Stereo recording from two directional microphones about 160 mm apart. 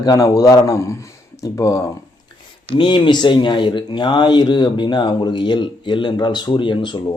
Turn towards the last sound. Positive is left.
turn(degrees=30)  # may be behind; listen again after turning